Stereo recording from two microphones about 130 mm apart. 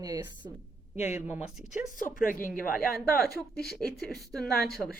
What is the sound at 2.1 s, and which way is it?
Speech, 90° left.